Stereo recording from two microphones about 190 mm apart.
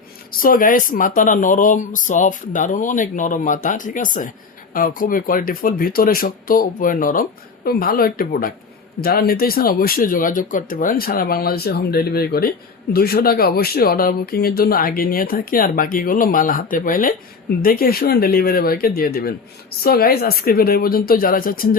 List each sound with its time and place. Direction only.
0.3 s speech: 50° left (ahead or behind)